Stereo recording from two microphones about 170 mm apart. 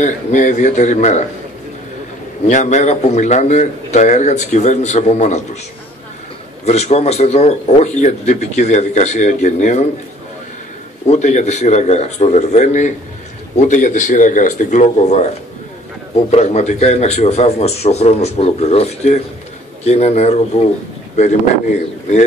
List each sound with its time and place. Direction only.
0.0 s a man's voice: 45° left (ahead or behind)
2.4 s a man's voice: 45° left (ahead or behind)
6.6 s a man's voice: 40° left (ahead or behind)
11.1 s a man's voice: 45° left (ahead or behind)